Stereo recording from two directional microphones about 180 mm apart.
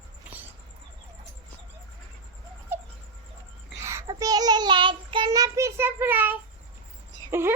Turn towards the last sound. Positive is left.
turn(degrees=-15)  # may be behind; listen again after turning